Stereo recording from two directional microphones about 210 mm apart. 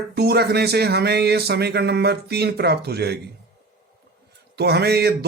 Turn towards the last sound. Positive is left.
turn(degrees=-50)  # may be behind; listen again after turning